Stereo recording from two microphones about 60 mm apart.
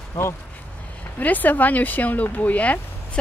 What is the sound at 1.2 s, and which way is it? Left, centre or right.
Speech, left.